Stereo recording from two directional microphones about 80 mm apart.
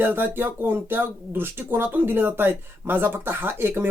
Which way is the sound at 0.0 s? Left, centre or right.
Right.